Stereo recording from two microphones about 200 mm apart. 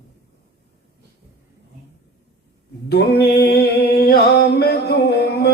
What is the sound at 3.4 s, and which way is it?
Music, 50° left (ahead or behind).